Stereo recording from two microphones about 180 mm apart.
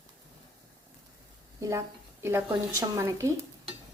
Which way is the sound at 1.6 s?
15° right (ahead or behind).